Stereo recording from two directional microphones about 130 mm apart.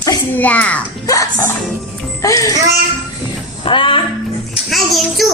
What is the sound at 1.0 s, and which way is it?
Music, 25° left (ahead or behind).